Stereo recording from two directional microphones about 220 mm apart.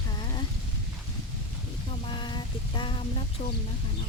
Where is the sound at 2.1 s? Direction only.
20° left (ahead or behind).